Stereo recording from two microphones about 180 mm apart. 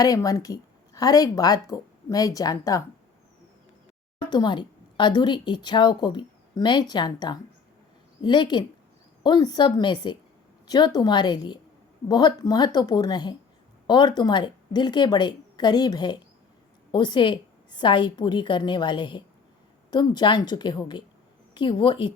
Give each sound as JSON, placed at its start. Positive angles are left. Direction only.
{"t": 0.0, "sound": "speech", "side_deg": 20}
{"t": 4.2, "sound": "speech", "side_deg": 25}